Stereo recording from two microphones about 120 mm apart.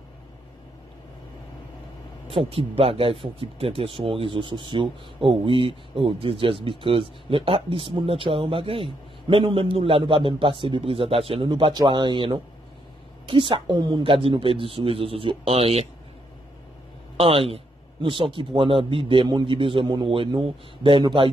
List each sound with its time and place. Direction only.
2.2 s speech: 50° right (ahead or behind)
11.4 s a man's voice: 40° right (ahead or behind); by 15.9 s 55° right (ahead or behind)
17.2 s speech: 50° right (ahead or behind)